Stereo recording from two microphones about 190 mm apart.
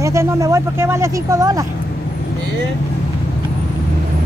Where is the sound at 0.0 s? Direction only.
15° right (ahead or behind).